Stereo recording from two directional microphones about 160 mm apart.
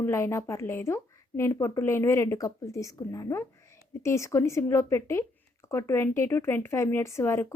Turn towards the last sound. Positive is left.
turn(degrees=15)  # may be behind; listen again after turning